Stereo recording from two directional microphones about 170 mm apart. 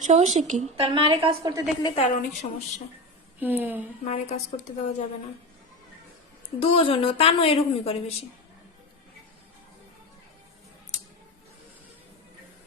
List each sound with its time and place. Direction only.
0.0 s speech: 45° right (ahead or behind)
0.9 s a woman's voice: 30° right (ahead or behind)
1.4 s a woman's voice: 20° right (ahead or behind)
2.0 s a woman's voice: 40° left (ahead or behind)
3.4 s a woman's voice: 10° right (ahead or behind)
4.1 s a woman's voice: 45° left (ahead or behind)
6.6 s a woman's voice: 35° left (ahead or behind)